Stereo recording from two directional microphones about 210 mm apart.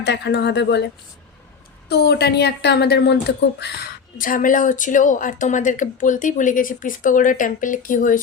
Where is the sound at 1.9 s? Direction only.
50° left (ahead or behind).